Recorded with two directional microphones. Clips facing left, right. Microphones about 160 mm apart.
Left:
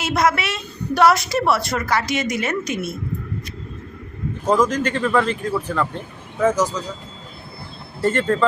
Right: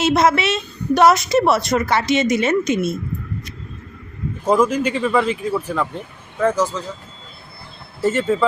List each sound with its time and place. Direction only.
0.0 s a woman's voice: 25° right (ahead or behind)
4.4 s speech: 10° right (ahead or behind)
8.0 s speech: 5° right (ahead or behind)